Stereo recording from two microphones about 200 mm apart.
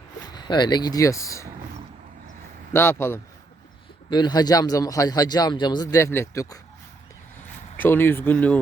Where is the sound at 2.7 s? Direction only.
10° left (ahead or behind).